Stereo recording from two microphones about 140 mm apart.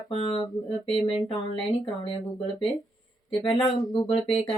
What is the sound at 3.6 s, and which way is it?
Speech, 40° left (ahead or behind).